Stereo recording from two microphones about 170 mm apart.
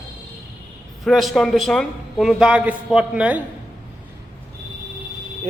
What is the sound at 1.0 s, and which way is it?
A man's voice, centre (ahead or behind).